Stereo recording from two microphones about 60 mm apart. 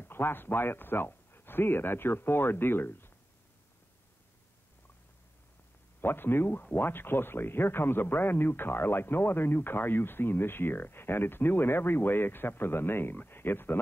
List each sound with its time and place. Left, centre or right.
0.0 s speech: left
5.9 s speech: left